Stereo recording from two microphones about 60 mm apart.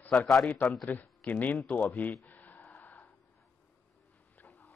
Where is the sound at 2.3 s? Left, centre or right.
Left.